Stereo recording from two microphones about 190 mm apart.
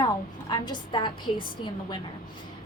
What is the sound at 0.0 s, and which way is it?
A woman's voice, 25° left (ahead or behind).